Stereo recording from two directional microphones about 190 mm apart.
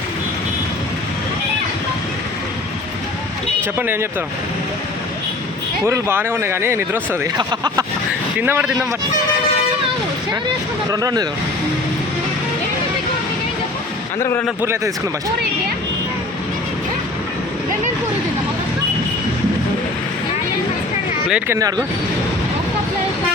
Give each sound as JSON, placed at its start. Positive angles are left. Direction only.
{"t": 3.8, "sound": "speech", "side_deg": -10}
{"t": 5.8, "sound": "speech", "side_deg": -10}
{"t": 7.3, "sound": "speech", "side_deg": -20}
{"t": 8.4, "sound": "speech", "side_deg": -10}
{"t": 10.9, "sound": "speech", "side_deg": -20}
{"t": 14.2, "sound": "a man's voice", "side_deg": 15}
{"t": 14.6, "sound": "speech", "side_deg": -15}
{"t": 21.2, "sound": "speech", "side_deg": -10}